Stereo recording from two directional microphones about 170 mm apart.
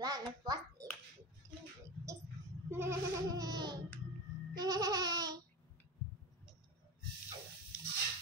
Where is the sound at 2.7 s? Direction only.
15° right (ahead or behind).